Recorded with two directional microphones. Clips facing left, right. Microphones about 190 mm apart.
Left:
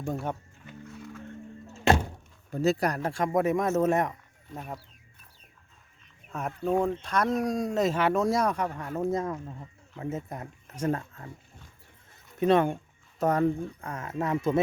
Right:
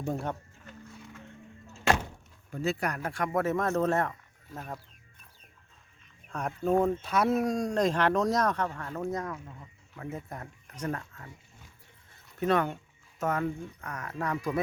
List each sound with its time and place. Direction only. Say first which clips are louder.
0.0 s speech: left 1 dB; centre (ahead or behind)
2.5 s speech: left 5 dB; 40° left (ahead or behind)
3.4 s speech: left 2 dB; 15° left (ahead or behind)
4.5 s speech: left 2 dB; centre (ahead or behind)
6.2 s speech: even; 5° left (ahead or behind)
9.0 s speech: left 5 dB; 25° left (ahead or behind)
12.4 s speech: left 4 dB; 20° left (ahead or behind)
13.1 s speech: left 6 dB; 35° left (ahead or behind)